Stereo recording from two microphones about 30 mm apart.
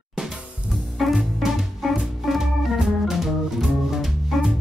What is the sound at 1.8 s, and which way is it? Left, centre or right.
Music, centre.